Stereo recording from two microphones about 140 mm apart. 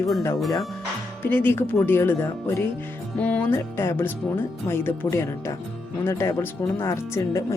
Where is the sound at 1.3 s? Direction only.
15° left (ahead or behind).